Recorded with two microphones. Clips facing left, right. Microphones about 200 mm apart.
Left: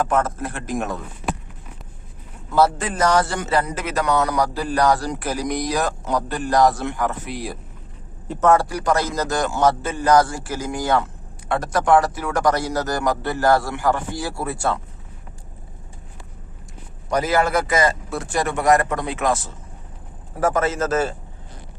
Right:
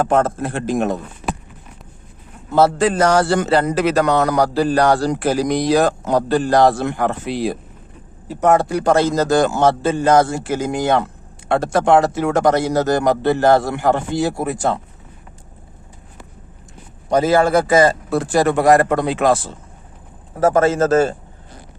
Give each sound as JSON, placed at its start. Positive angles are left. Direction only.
{"t": 0.0, "sound": "a man's voice", "side_deg": -30}
{"t": 2.5, "sound": "a man's voice", "side_deg": -30}
{"t": 3.3, "sound": "speech", "side_deg": -65}
{"t": 4.8, "sound": "a man's voice", "side_deg": -30}
{"t": 17.1, "sound": "a man's voice", "side_deg": -25}